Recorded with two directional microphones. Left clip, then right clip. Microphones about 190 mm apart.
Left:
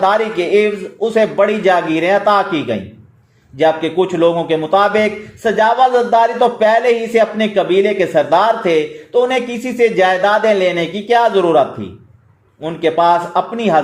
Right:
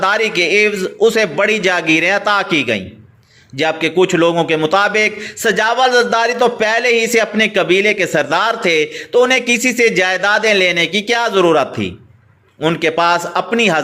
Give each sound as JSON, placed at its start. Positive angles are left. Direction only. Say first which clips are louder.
{"t": 0.0, "sound": "speech", "louder": "even", "side_deg": -25}